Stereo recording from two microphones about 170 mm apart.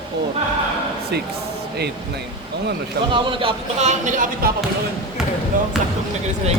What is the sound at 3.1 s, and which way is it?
Speech, 30° right (ahead or behind).